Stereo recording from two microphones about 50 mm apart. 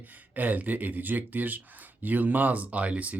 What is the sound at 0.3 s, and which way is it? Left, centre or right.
Speech, right.